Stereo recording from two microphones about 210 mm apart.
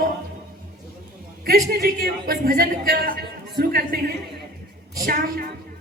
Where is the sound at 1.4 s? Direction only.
45° right (ahead or behind).